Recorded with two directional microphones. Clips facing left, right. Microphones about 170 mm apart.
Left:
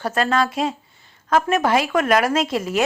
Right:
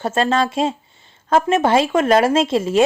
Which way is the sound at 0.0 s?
25° right (ahead or behind).